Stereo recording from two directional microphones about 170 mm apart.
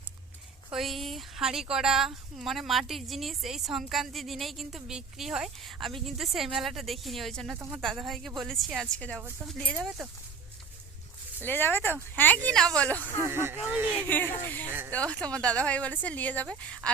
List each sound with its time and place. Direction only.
0.7 s a woman's voice: centre (ahead or behind)
7.5 s speech: 10° right (ahead or behind)
7.8 s a woman's voice: centre (ahead or behind)
11.4 s speech: 10° left (ahead or behind)
13.2 s speech: 15° right (ahead or behind)
14.1 s speech: 10° left (ahead or behind)
14.7 s speech: 10° right (ahead or behind)
14.9 s speech: 5° left (ahead or behind)